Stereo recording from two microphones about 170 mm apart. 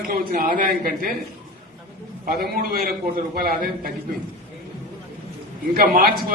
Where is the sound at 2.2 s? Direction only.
60° right (ahead or behind).